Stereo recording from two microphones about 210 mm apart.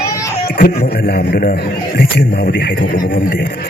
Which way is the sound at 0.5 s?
45° left (ahead or behind).